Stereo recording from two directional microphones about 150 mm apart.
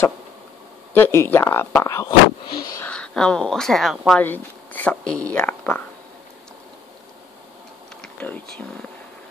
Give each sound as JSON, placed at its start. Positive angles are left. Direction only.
{"t": 0.9, "sound": "speech", "side_deg": 15}
{"t": 2.8, "sound": "speech", "side_deg": 5}
{"t": 4.2, "sound": "speech", "side_deg": 10}
{"t": 8.0, "sound": "speech", "side_deg": 10}